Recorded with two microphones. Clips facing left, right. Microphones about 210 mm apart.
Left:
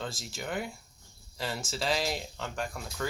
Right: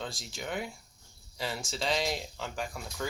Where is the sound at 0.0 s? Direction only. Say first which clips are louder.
Left 1 dB; centre (ahead or behind).